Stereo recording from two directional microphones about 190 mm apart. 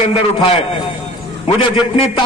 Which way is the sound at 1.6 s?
25° left (ahead or behind).